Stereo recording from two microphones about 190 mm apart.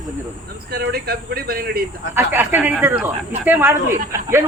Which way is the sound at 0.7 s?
55° right (ahead or behind).